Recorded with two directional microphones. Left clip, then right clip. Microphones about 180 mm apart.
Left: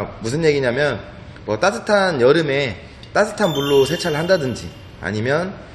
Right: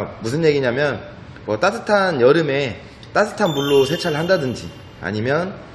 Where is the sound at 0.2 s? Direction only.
10° right (ahead or behind).